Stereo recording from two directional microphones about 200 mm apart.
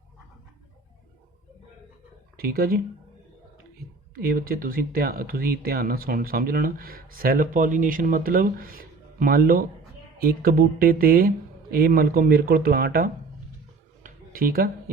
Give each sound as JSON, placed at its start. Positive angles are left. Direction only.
{"t": 2.4, "sound": "speech", "side_deg": -50}
{"t": 4.1, "sound": "speech", "side_deg": -50}
{"t": 14.0, "sound": "a sound", "side_deg": -45}